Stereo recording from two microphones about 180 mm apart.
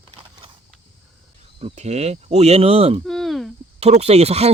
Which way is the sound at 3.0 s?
Centre (ahead or behind).